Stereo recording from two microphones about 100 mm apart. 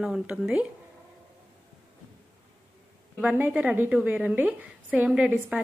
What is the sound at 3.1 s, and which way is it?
A woman's voice, 15° right (ahead or behind).